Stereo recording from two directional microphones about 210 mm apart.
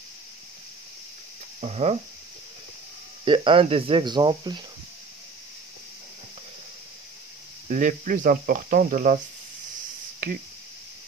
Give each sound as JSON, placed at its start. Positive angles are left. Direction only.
{"t": 1.6, "sound": "speech", "side_deg": -30}
{"t": 3.3, "sound": "speech", "side_deg": -25}
{"t": 7.6, "sound": "speech", "side_deg": -35}
{"t": 10.2, "sound": "speech", "side_deg": -40}